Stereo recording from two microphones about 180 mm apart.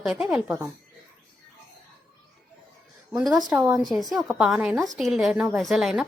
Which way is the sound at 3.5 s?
10° right (ahead or behind).